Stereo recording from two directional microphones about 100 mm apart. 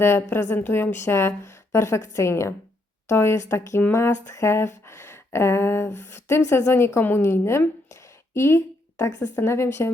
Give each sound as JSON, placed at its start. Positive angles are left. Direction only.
{"t": 0.0, "sound": "speech", "side_deg": 25}